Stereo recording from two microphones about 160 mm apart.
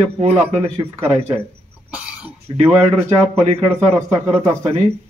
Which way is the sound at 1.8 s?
10° right (ahead or behind).